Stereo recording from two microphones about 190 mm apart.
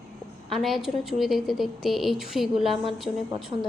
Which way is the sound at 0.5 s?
Centre (ahead or behind).